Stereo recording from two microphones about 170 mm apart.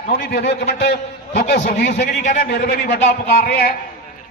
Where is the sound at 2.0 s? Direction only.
55° left (ahead or behind).